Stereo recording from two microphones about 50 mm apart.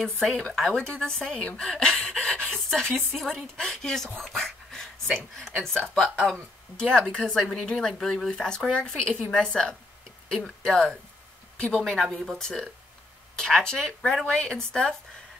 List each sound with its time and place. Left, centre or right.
0.0 s speech: centre
1.6 s a sound: centre
3.2 s speech: centre
4.2 s a sound: centre
5.5 s speech: centre
12.0 s speech: centre
12.4 s speech: centre